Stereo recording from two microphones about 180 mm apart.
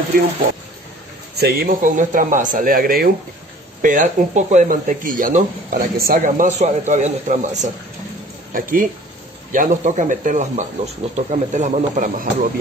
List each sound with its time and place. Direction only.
1.3 s speech: 60° right (ahead or behind); by 12.4 s 45° right (ahead or behind)